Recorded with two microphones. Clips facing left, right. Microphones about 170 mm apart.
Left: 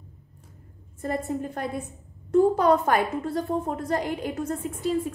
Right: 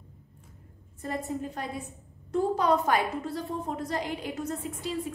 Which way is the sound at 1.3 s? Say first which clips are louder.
Left 4 dB; 55° left (ahead or behind).